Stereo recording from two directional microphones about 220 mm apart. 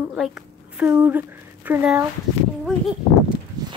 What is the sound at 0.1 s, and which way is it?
Speech, 5° right (ahead or behind).